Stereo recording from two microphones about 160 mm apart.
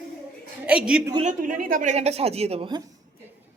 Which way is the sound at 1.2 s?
50° right (ahead or behind).